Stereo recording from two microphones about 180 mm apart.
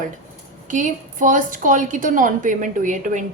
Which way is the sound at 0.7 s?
45° right (ahead or behind).